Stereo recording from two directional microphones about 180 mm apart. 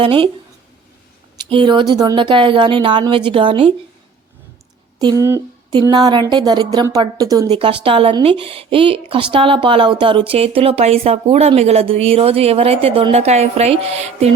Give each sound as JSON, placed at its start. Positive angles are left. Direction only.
{"t": 0.0, "sound": "speech", "side_deg": -30}
{"t": 1.5, "sound": "speech", "side_deg": -25}
{"t": 4.9, "sound": "speech", "side_deg": -20}